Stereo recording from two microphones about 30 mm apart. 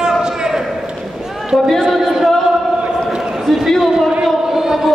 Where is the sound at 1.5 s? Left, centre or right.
Centre.